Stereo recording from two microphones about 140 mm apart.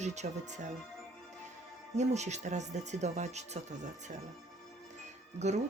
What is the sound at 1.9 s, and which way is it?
Speech, 55° right (ahead or behind).